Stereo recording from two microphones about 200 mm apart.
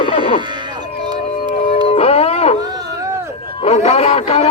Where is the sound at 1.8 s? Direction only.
30° left (ahead or behind).